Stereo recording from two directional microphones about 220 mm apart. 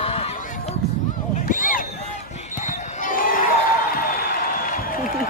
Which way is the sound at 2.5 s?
35° left (ahead or behind).